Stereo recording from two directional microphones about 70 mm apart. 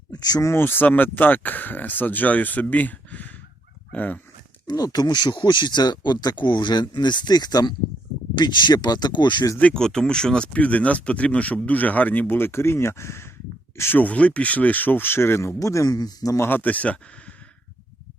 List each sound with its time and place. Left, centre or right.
0.1 s speech: left
0.4 s speech: left
4.6 s speech: left
9.7 s speech: centre; by 12.2 s left
12.3 s speech: left
15.5 s a man's voice: left
16.4 s speech: left